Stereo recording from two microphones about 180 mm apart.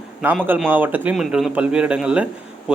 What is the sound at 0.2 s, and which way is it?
A man's voice, 10° right (ahead or behind).